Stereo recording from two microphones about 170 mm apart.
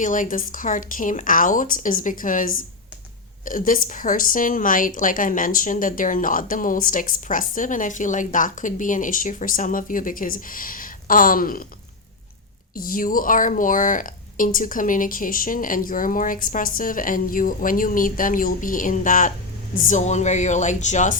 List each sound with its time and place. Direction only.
0.0 s a woman's voice: 50° left (ahead or behind)
12.7 s a woman's voice: 55° left (ahead or behind)